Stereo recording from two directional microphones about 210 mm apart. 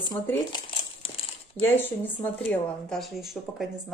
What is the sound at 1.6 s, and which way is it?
Speech, 10° left (ahead or behind).